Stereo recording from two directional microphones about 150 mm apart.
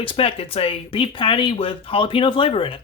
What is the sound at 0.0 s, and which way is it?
Speech, 40° left (ahead or behind).